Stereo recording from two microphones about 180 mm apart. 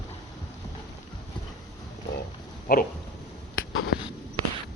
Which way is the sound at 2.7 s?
50° left (ahead or behind).